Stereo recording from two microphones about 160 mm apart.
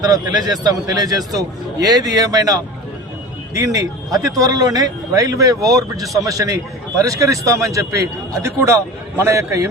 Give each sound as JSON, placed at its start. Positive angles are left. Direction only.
{"t": 0.0, "sound": "speech", "side_deg": -25}